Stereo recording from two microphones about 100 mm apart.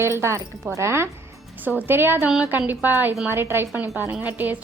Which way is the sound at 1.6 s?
15° right (ahead or behind).